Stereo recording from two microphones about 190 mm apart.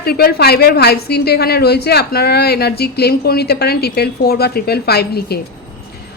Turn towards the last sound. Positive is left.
turn(degrees=55)  # may be behind; listen again after turning